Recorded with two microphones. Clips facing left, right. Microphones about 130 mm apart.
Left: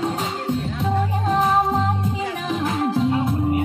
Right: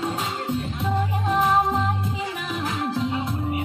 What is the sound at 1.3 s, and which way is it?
Music, 30° left (ahead or behind).